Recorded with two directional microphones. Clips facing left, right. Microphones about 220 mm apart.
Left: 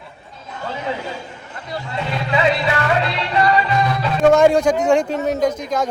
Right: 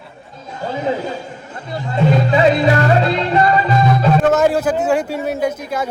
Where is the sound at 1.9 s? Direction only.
45° right (ahead or behind).